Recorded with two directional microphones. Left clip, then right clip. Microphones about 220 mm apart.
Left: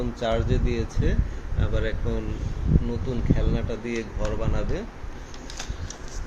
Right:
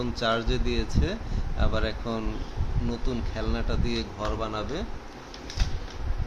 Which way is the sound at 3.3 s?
25° right (ahead or behind).